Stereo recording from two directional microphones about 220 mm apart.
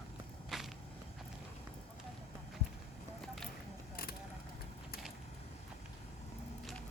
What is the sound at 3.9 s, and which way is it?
Vehicle, 45° left (ahead or behind).